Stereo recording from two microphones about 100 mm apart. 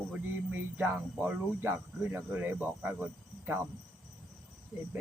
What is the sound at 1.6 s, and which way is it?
Cricket, 20° right (ahead or behind).